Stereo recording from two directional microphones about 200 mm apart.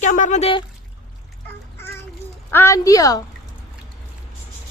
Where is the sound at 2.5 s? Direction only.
15° left (ahead or behind).